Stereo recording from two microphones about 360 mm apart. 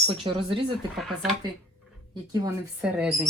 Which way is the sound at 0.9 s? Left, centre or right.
Centre.